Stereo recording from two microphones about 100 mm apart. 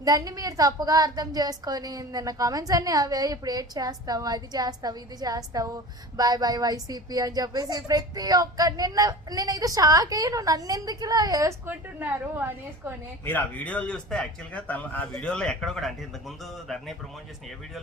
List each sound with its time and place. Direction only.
0.0 s a woman's voice: 40° right (ahead or behind)
11.6 s a woman's voice: 20° right (ahead or behind)
13.2 s speech: 15° left (ahead or behind)